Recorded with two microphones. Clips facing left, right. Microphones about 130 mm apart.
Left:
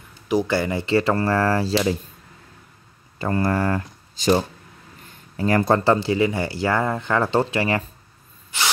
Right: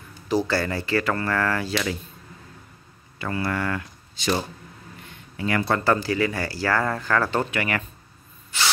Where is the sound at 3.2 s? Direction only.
40° left (ahead or behind).